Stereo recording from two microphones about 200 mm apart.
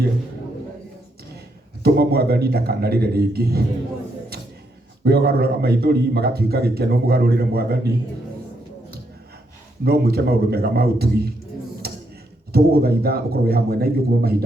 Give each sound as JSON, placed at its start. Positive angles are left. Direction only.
{"t": 1.8, "sound": "a man's voice", "side_deg": -50}
{"t": 5.0, "sound": "a man's voice", "side_deg": -50}
{"t": 9.8, "sound": "a man's voice", "side_deg": -50}
{"t": 11.8, "sound": "a sound", "side_deg": -50}
{"t": 12.5, "sound": "a man's voice", "side_deg": -50}